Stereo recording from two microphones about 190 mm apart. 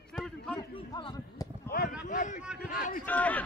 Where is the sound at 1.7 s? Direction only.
50° left (ahead or behind).